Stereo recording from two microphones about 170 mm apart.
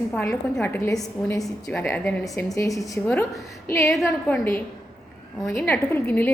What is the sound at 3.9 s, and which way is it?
A woman's voice, 5° left (ahead or behind).